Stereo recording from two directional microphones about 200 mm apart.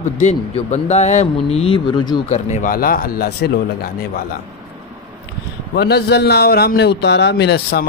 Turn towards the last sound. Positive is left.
turn(degrees=55)  # may be behind; listen again after turning